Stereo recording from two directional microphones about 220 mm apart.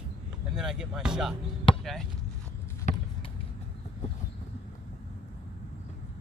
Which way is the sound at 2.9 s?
35° left (ahead or behind).